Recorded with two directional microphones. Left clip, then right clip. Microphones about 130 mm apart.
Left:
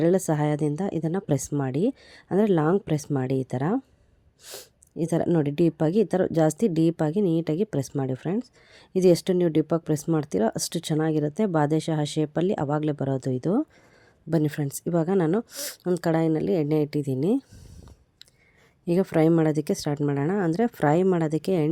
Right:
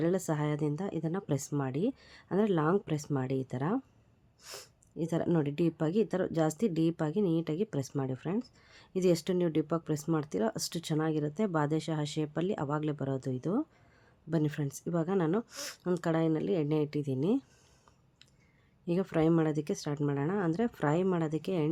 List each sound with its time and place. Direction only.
0.0 s a woman's voice: 45° left (ahead or behind)
4.4 s speech: 30° left (ahead or behind)
4.9 s a woman's voice: 45° left (ahead or behind)
15.4 s speech: 30° left (ahead or behind)
16.0 s a woman's voice: 45° left (ahead or behind)
18.9 s a woman's voice: 50° left (ahead or behind)